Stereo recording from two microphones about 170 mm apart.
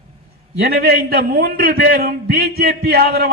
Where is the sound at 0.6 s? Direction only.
65° right (ahead or behind).